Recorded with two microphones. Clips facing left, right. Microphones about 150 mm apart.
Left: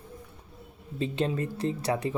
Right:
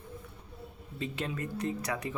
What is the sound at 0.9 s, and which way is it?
Speech, 30° left (ahead or behind).